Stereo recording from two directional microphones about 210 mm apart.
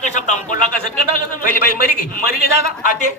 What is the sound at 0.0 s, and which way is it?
Speech, 35° left (ahead or behind).